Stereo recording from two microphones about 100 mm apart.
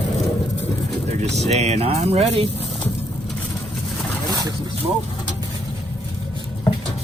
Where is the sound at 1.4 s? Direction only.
90° right.